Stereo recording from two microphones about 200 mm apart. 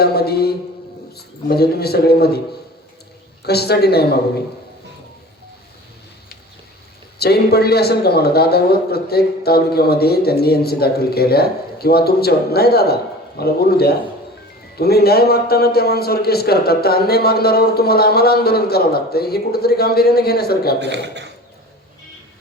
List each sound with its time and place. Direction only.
0.0 s mantra: 50° left (ahead or behind)
1.1 s a man's voice: 50° left (ahead or behind)
3.4 s a man's voice: 55° left (ahead or behind)
7.2 s a man's voice: 55° left (ahead or behind)
20.8 s speech: 60° right (ahead or behind)